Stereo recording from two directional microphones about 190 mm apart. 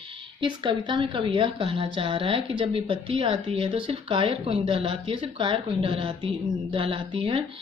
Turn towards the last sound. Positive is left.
turn(degrees=-25)  # may be behind; listen again after turning